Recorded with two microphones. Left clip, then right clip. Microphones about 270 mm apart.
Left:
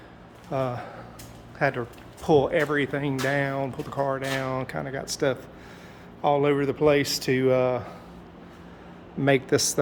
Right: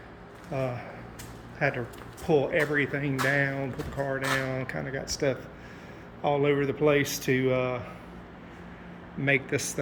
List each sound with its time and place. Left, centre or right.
0.5 s speech: centre
9.2 s a man's voice: centre